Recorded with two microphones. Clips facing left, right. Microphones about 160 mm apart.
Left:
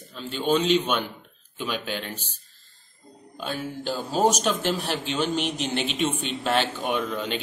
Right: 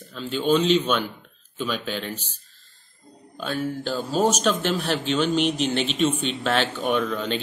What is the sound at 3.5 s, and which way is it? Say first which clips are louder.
Speech: right 3 dB; 15° left (ahead or behind).